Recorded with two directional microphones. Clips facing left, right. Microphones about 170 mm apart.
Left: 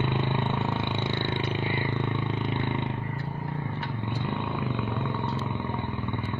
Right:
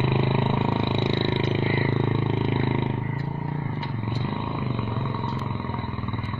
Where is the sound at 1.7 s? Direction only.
45° right (ahead or behind).